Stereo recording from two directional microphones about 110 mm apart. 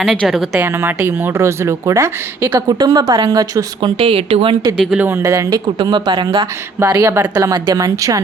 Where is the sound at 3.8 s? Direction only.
60° right (ahead or behind).